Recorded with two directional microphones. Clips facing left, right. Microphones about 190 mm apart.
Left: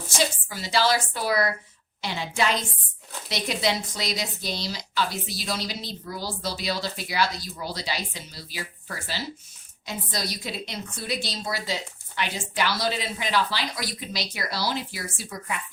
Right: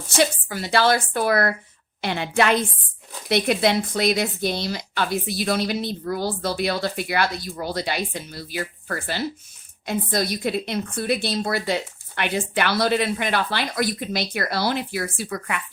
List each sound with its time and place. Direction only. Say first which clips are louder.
0.2 s speech: right 6 dB; 60° right (ahead or behind)